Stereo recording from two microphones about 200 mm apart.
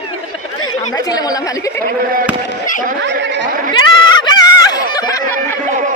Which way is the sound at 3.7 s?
20° left (ahead or behind).